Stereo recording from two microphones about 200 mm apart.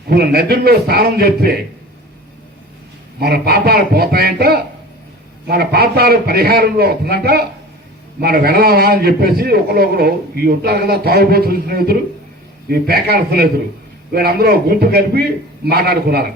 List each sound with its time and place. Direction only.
0.1 s a man's voice: 50° right (ahead or behind)
3.2 s a man's voice: 50° right (ahead or behind)